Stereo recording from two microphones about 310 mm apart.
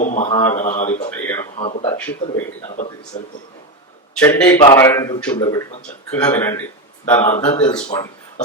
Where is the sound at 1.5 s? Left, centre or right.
Centre.